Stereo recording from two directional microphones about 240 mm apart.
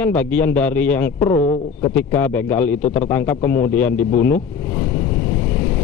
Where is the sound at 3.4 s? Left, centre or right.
Left.